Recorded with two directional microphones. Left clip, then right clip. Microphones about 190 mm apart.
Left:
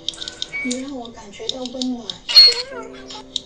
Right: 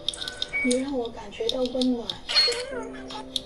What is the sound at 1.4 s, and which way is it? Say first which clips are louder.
Speech: right 1 dB; 25° right (ahead or behind).